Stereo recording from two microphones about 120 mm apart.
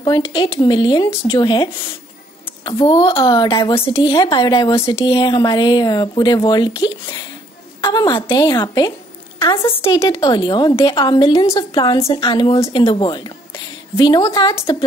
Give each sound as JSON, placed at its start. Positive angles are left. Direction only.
{"t": 0.0, "sound": "speech", "side_deg": 35}
{"t": 10.1, "sound": "speech", "side_deg": 40}